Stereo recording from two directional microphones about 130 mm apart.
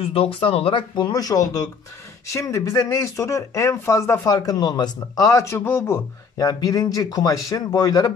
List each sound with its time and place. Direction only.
0.0 s speech: 45° left (ahead or behind); by 8.1 s 30° left (ahead or behind)